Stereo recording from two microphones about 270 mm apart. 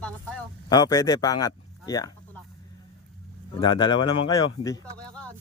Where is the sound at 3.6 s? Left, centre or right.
Centre.